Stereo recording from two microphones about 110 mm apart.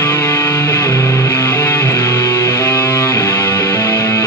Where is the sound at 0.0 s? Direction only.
20° left (ahead or behind).